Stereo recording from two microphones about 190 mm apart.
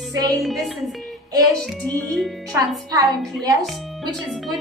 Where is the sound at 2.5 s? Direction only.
20° right (ahead or behind).